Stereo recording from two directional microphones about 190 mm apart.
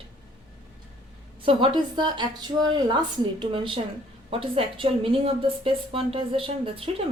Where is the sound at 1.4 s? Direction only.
25° right (ahead or behind).